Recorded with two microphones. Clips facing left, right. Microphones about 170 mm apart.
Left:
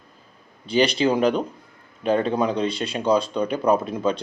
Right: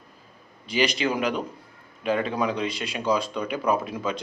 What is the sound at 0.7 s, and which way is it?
A man's voice, 30° left (ahead or behind).